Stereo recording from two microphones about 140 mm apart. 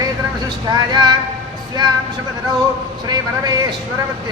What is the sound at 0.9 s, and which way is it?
Speech, 30° right (ahead or behind).